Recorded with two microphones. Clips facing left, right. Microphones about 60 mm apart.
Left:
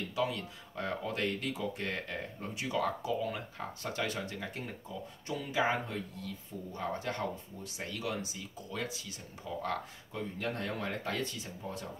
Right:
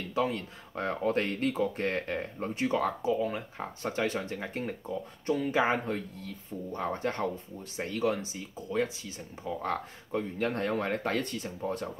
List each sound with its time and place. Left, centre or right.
0.1 s speech: right